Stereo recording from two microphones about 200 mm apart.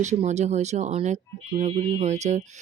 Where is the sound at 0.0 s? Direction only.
35° right (ahead or behind).